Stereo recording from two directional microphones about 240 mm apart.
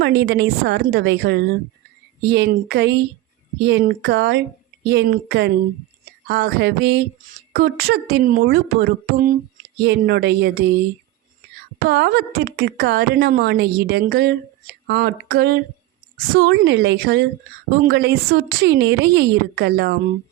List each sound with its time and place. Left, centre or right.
0.0 s a woman's voice: right
11.8 s a woman's voice: right